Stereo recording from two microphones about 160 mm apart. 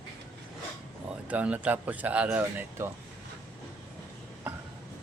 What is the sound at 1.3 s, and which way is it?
Speech, 10° right (ahead or behind).